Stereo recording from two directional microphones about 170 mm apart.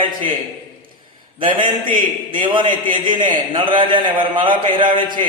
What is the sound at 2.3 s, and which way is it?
A man's voice, 30° right (ahead or behind).